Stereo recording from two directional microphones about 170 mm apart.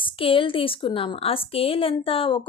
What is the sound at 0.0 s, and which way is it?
A woman's voice, 30° left (ahead or behind).